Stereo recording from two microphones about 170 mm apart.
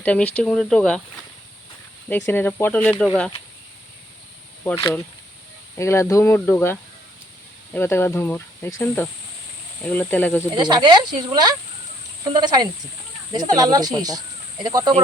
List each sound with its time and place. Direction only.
0.0 s cricket: 10° left (ahead or behind)
2.0 s cricket: 10° left (ahead or behind)
3.0 s speech: 5° left (ahead or behind)
4.6 s cricket: 15° left (ahead or behind)
10.5 s speech: 25° right (ahead or behind)